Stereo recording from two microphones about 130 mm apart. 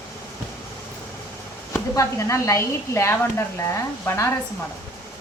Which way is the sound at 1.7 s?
25° left (ahead or behind).